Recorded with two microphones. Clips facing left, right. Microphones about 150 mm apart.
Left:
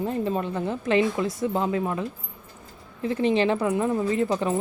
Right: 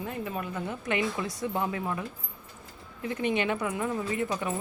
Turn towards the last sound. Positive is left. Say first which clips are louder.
# left 7 dB
turn(degrees=25)  # may be behind; listen again after turning